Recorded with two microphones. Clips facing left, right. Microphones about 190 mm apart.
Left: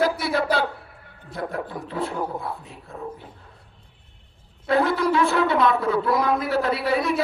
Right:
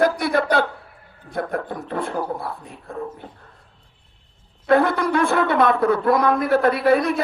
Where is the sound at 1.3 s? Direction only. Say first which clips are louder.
Right 4 dB; 50° right (ahead or behind).